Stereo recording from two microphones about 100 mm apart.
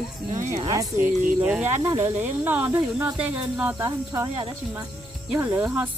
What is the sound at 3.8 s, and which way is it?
Speech, 35° right (ahead or behind).